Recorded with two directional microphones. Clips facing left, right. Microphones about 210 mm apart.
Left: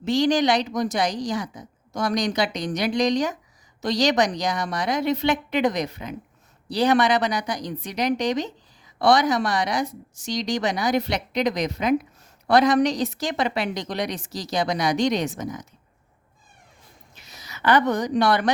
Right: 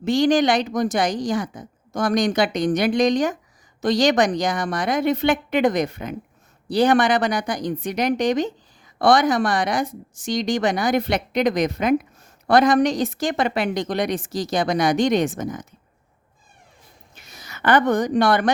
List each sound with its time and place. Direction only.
0.0 s a woman's voice: 50° right (ahead or behind)
17.2 s speech: 50° right (ahead or behind)